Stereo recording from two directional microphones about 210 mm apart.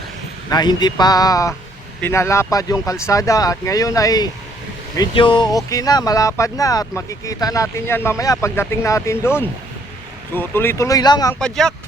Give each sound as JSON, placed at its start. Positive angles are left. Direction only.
{"t": 0.5, "sound": "speech", "side_deg": 20}
{"t": 11.3, "sound": "speech", "side_deg": 5}